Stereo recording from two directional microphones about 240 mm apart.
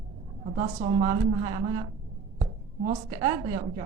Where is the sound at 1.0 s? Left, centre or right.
Right.